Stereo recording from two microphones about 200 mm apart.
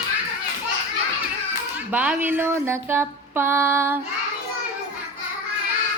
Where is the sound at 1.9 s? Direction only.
10° right (ahead or behind).